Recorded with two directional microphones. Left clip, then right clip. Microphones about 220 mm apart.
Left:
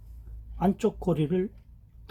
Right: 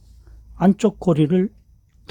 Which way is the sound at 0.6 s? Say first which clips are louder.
Right 8 dB; 45° right (ahead or behind).